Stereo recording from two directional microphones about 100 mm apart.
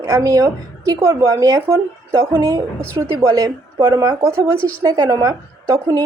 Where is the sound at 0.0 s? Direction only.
35° right (ahead or behind).